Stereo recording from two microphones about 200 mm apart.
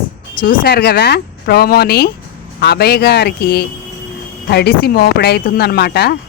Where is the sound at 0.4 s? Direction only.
50° left (ahead or behind).